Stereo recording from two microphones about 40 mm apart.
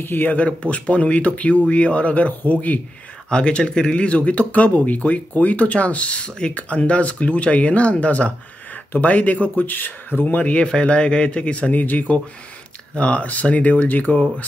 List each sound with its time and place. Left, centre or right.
0.0 s speech: left
0.3 s speech: left
3.3 s speech: left
10.3 s speech: left
11.7 s speech: left
12.9 s speech: left